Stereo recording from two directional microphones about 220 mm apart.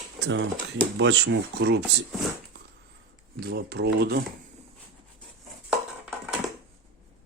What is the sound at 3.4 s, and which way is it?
Speech, 45° right (ahead or behind).